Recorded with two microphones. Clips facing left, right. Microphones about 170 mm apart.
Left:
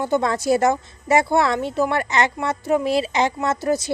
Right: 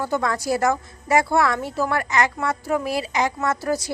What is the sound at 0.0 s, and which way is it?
A woman's voice, 25° left (ahead or behind).